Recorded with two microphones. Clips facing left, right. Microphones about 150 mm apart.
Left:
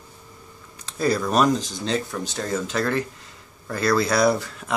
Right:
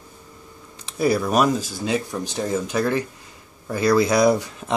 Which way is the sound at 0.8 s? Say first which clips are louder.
Right 2 dB; 10° right (ahead or behind).